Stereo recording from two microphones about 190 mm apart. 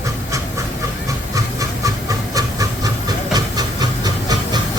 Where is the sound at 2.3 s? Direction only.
20° right (ahead or behind).